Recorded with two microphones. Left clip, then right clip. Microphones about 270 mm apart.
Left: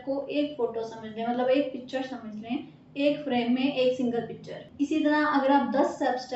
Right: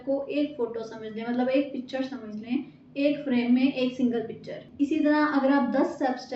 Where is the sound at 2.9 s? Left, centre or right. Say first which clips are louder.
Even; centre.